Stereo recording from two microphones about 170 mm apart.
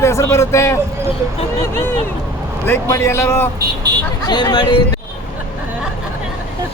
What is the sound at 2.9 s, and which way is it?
Speech, 15° left (ahead or behind).